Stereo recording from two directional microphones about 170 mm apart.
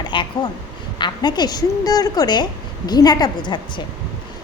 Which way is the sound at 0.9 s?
25° left (ahead or behind).